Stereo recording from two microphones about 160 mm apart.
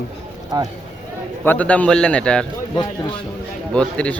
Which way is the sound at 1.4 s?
10° left (ahead or behind).